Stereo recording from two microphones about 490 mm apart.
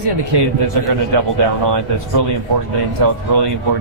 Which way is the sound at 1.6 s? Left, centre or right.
Right.